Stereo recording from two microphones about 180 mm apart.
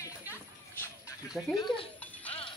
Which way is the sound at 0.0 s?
10° left (ahead or behind).